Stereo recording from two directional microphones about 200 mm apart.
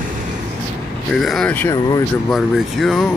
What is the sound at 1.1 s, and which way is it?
Speech, centre (ahead or behind).